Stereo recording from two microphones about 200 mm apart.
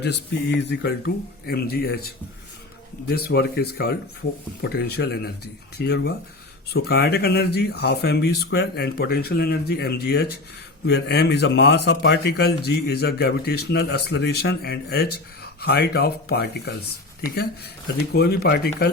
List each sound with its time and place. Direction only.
0.0 s speech: 55° left (ahead or behind)
18.1 s speech: 55° left (ahead or behind)